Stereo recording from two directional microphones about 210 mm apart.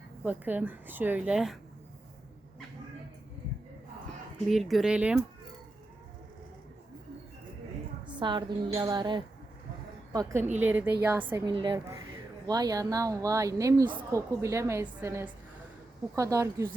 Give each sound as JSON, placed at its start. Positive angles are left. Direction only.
{"t": 0.2, "sound": "a woman's voice", "side_deg": -10}
{"t": 4.4, "sound": "speech", "side_deg": 0}
{"t": 8.1, "sound": "a woman's voice", "side_deg": -20}